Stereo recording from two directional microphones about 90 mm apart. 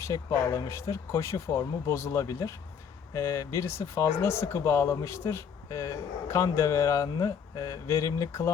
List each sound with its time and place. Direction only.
0.1 s speech: 40° left (ahead or behind)